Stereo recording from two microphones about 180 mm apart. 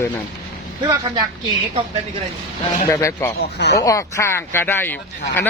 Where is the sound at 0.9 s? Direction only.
25° right (ahead or behind).